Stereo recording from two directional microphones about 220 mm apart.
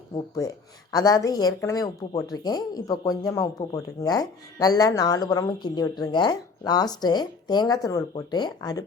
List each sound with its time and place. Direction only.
0.1 s speech: 15° left (ahead or behind)